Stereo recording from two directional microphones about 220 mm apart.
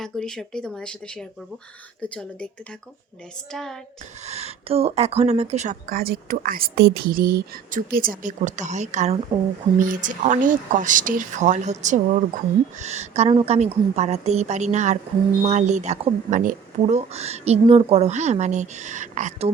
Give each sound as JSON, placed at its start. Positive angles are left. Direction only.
{"t": 0.0, "sound": "speech", "side_deg": 0}
{"t": 3.5, "sound": "speech", "side_deg": 0}
{"t": 4.2, "sound": "a woman's voice", "side_deg": -30}